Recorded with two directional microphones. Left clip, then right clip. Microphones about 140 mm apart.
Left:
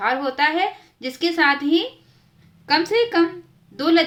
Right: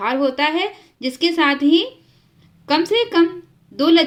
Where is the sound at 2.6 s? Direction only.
25° right (ahead or behind).